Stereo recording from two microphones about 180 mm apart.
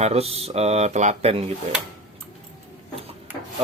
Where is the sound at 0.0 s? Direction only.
35° right (ahead or behind).